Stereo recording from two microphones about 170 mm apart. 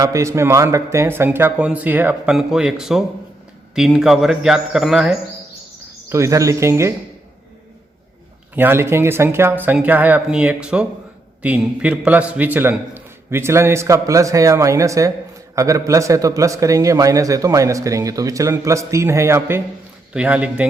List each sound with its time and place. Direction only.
0.0 s a man's voice: 15° right (ahead or behind); by 5.1 s centre (ahead or behind)
6.1 s a man's voice: 15° right (ahead or behind)
8.5 s a man's voice: 15° right (ahead or behind)